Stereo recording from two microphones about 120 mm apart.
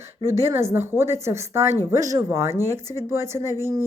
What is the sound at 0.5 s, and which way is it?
Speech, 20° right (ahead or behind).